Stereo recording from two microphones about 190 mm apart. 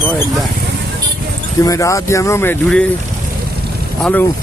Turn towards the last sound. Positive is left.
turn(degrees=10)  # may be behind; listen again after turning